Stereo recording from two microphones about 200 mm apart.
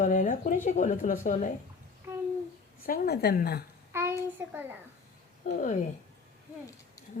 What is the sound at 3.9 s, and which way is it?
Speech, 10° right (ahead or behind).